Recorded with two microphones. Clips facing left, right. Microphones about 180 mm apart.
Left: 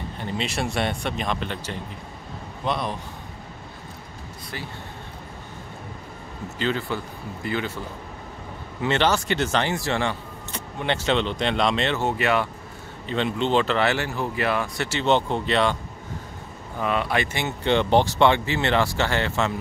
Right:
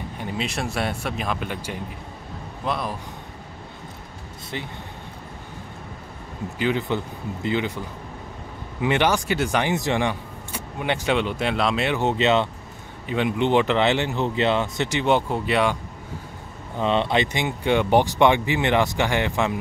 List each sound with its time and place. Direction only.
0.2 s speech: centre (ahead or behind)
6.6 s speech: 20° right (ahead or behind)
8.8 s speech: 10° right (ahead or behind)
13.0 s speech: 10° right (ahead or behind)
16.7 s speech: 25° right (ahead or behind)